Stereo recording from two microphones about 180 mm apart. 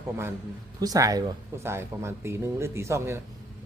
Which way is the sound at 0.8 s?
20° right (ahead or behind).